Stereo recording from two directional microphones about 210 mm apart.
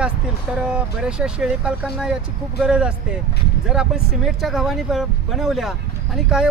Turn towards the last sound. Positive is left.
turn(degrees=-5)  # may be behind; listen again after turning